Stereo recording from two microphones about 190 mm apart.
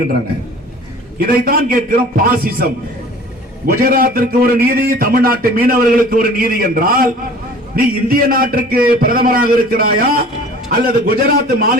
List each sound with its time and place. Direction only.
1.2 s a man's voice: 50° right (ahead or behind)